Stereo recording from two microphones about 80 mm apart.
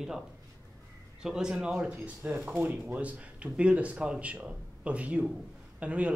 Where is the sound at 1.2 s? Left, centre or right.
Centre.